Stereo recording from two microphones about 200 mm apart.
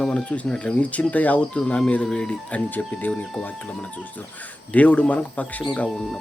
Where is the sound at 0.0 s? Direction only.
5° left (ahead or behind).